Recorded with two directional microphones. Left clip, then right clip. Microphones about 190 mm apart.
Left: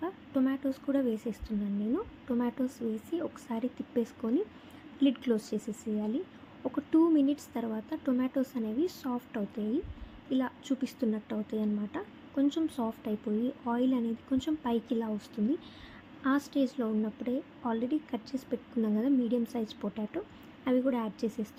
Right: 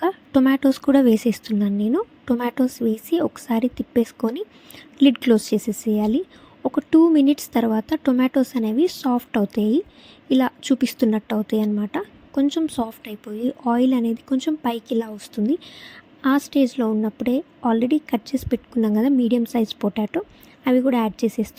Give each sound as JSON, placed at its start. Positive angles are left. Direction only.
{"t": 0.0, "sound": "a woman's voice", "side_deg": -55}